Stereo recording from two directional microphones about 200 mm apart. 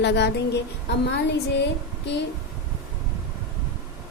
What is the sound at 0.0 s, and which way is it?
A woman's voice, 60° left (ahead or behind).